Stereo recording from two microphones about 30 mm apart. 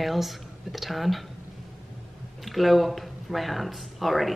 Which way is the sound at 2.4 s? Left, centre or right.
Centre.